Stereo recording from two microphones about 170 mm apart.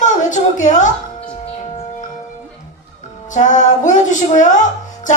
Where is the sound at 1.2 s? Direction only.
35° left (ahead or behind).